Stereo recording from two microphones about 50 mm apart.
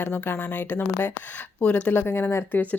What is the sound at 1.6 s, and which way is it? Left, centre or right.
Speech, left.